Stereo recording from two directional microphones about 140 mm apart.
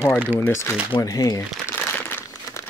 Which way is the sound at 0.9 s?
25° left (ahead or behind).